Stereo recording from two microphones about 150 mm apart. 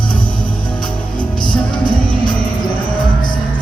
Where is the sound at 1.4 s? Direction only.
30° left (ahead or behind).